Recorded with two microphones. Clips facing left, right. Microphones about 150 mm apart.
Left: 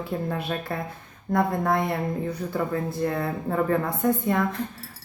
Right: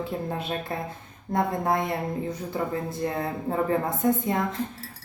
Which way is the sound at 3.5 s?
20° right (ahead or behind).